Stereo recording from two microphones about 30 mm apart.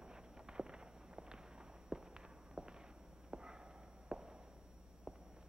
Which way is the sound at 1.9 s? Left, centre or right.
Right.